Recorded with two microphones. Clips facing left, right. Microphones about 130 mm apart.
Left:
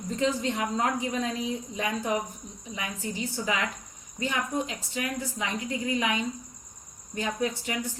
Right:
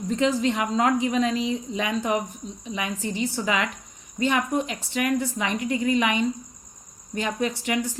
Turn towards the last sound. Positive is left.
turn(degrees=-85)